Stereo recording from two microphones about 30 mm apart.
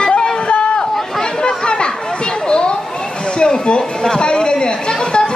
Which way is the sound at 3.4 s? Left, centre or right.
Left.